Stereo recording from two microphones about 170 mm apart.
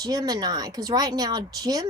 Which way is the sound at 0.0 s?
20° right (ahead or behind).